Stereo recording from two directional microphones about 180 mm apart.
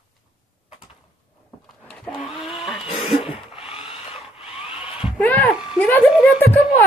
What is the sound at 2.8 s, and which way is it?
Cough, 30° left (ahead or behind).